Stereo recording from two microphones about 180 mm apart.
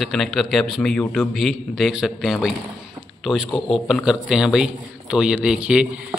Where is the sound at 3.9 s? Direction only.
Centre (ahead or behind).